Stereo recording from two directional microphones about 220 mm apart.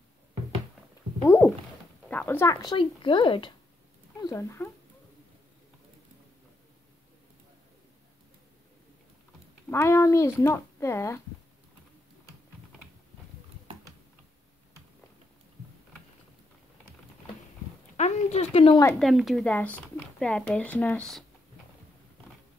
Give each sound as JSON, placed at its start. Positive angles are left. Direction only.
{"t": 1.2, "sound": "speech", "side_deg": 10}
{"t": 9.7, "sound": "speech", "side_deg": 10}
{"t": 17.9, "sound": "speech", "side_deg": 30}
{"t": 18.9, "sound": "a woman's voice", "side_deg": 0}